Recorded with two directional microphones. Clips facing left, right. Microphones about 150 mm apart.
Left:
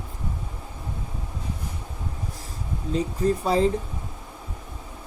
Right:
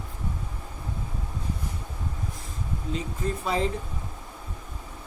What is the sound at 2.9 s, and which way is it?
Speech, 35° left (ahead or behind).